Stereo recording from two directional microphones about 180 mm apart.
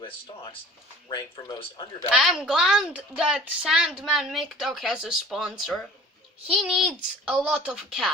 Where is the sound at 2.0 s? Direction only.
5° right (ahead or behind).